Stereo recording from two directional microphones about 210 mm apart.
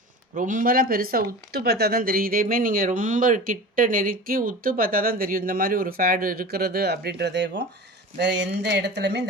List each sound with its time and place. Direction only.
0.3 s speech: 40° right (ahead or behind); by 9.2 s 55° right (ahead or behind)